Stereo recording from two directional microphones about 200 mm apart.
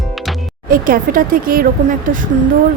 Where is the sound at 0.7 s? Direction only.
45° right (ahead or behind).